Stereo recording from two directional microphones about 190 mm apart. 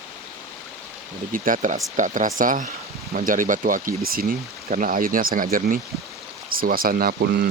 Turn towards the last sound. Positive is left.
turn(degrees=-55)  # may be behind; listen again after turning